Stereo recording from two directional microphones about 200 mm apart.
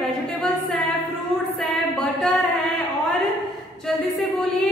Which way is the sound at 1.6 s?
Centre (ahead or behind).